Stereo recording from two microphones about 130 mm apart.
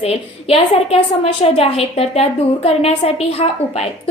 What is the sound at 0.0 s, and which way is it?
A woman's voice, 50° left (ahead or behind).